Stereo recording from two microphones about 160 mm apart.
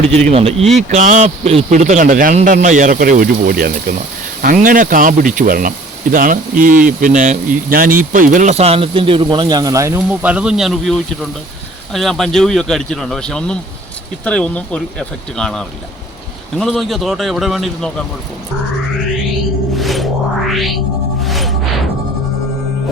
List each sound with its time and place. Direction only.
0.3 s speech: 40° right (ahead or behind)
0.6 s a man's voice: centre (ahead or behind)
0.9 s a man's voice: 50° right (ahead or behind); by 18.0 s 5° left (ahead or behind)
19.7 s music: centre (ahead or behind)
20.6 s a man's voice: centre (ahead or behind)
21.2 s music: centre (ahead or behind)